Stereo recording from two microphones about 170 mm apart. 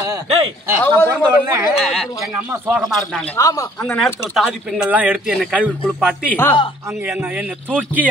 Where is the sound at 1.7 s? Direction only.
Centre (ahead or behind).